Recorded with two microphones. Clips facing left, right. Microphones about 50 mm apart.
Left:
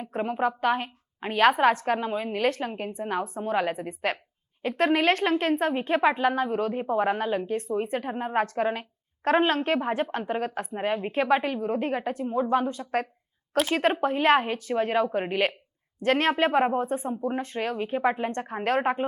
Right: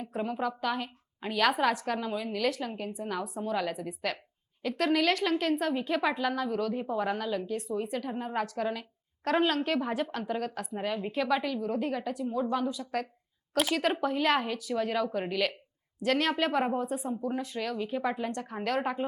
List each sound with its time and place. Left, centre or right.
0.0 s speech: left